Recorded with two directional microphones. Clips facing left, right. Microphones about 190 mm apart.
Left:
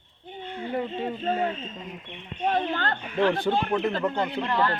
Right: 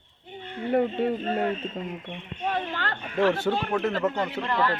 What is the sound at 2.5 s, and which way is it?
Speech, 35° left (ahead or behind).